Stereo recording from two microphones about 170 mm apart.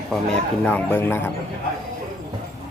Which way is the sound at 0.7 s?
10° left (ahead or behind).